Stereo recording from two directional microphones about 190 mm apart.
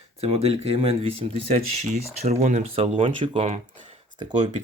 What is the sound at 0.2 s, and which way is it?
Speech, 30° right (ahead or behind).